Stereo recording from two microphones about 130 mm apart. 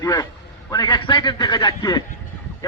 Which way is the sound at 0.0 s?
25° left (ahead or behind).